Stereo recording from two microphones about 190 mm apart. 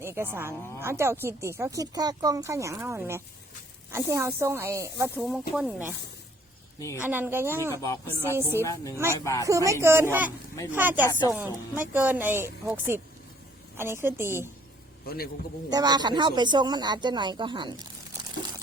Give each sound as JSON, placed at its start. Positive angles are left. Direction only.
{"t": 0.0, "sound": "a woman's voice", "side_deg": -15}
{"t": 6.7, "sound": "a woman's voice", "side_deg": 15}
{"t": 7.0, "sound": "a woman's voice", "side_deg": -10}
{"t": 7.7, "sound": "speech", "side_deg": 15}
{"t": 8.3, "sound": "a woman's voice", "side_deg": -10}
{"t": 8.6, "sound": "speech", "side_deg": 15}
{"t": 9.5, "sound": "a woman's voice", "side_deg": -15}
{"t": 15.0, "sound": "a man's voice", "side_deg": 55}
{"t": 15.7, "sound": "speech", "side_deg": -20}